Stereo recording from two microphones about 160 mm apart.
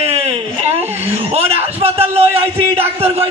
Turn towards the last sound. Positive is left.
turn(degrees=-40)  # may be behind; listen again after turning